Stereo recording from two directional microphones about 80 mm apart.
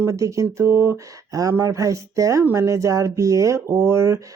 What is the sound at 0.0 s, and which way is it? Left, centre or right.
Speech, right.